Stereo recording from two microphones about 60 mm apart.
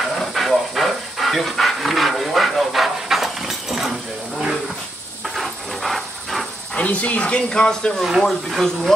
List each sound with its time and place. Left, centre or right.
0.0 s dog: centre
5.3 s a sound: centre
6.7 s speech: left
8.2 s speech: centre